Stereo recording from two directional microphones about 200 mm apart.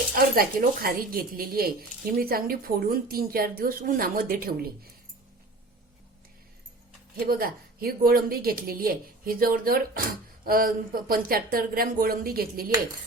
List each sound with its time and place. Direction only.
0.2 s speech: 50° right (ahead or behind)
7.3 s speech: 45° right (ahead or behind)